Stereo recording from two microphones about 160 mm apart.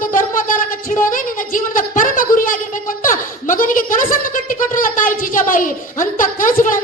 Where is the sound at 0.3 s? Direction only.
60° left (ahead or behind).